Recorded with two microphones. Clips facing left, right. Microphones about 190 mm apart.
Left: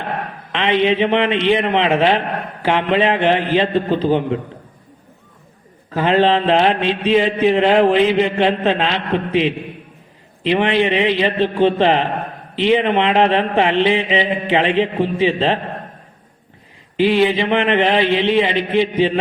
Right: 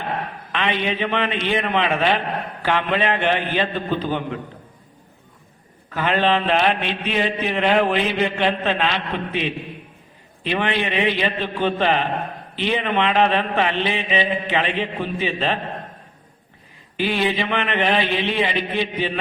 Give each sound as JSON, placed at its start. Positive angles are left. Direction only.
{"t": 0.5, "sound": "mantra", "side_deg": 25}
{"t": 5.9, "sound": "mantra", "side_deg": 30}
{"t": 17.0, "sound": "mantra", "side_deg": 25}